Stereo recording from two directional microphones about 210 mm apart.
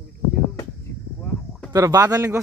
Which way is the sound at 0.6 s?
15° left (ahead or behind).